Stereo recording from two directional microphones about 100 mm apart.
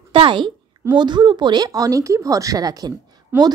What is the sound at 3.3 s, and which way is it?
Speech, 20° right (ahead or behind).